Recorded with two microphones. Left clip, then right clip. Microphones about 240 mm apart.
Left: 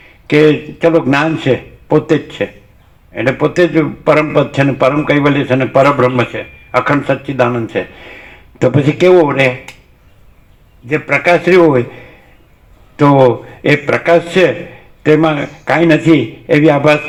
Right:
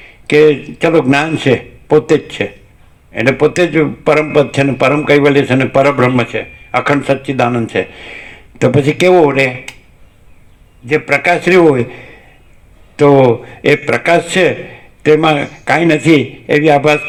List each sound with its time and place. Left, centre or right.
0.3 s a man's voice: right
10.8 s a man's voice: right
13.0 s a man's voice: right